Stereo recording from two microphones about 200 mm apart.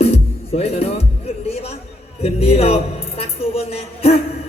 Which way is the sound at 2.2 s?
30° left (ahead or behind).